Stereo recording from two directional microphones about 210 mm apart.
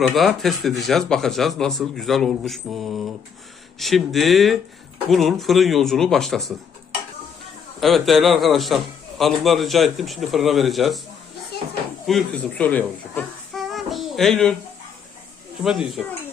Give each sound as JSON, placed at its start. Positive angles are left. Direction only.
{"t": 0.0, "sound": "a man's voice", "side_deg": 0}
{"t": 7.8, "sound": "a man's voice", "side_deg": 0}
{"t": 12.0, "sound": "speech", "side_deg": 5}
{"t": 15.6, "sound": "a man's voice", "side_deg": -5}